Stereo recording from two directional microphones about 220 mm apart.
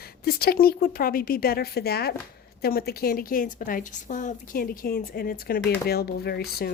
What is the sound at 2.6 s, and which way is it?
A woman's voice, 45° left (ahead or behind).